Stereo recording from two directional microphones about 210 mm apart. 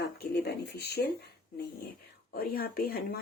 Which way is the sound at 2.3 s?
45° left (ahead or behind).